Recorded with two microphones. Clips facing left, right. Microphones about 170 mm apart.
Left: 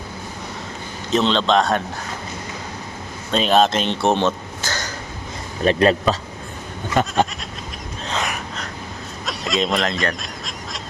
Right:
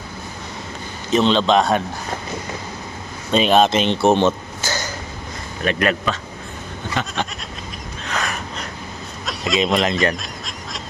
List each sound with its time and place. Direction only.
1.1 s speech: 5° right (ahead or behind)
3.3 s speech: 5° right (ahead or behind)
5.6 s speech: 30° left (ahead or behind)
7.0 s goat: 45° left (ahead or behind)
8.0 s a sound: 25° left (ahead or behind)
9.2 s speech: centre (ahead or behind)
10.2 s goose: centre (ahead or behind)